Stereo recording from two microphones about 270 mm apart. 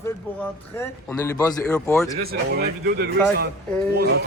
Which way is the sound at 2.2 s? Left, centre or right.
Right.